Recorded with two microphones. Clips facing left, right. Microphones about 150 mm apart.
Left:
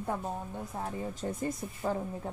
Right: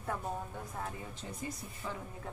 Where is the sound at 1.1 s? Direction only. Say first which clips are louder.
Left 8 dB; 45° left (ahead or behind).